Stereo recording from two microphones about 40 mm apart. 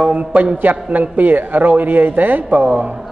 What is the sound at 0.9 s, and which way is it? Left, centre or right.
A woman's voice, right.